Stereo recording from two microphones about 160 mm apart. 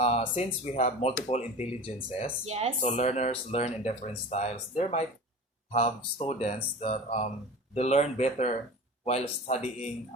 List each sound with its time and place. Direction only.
0.0 s speech: 40° left (ahead or behind)
2.5 s speech: 40° right (ahead or behind)
2.8 s speech: 45° left (ahead or behind)